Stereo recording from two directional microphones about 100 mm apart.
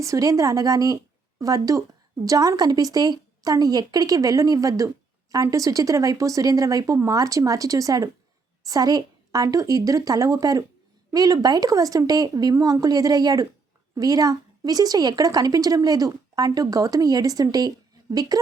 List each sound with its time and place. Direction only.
0.0 s a woman's voice: 35° right (ahead or behind)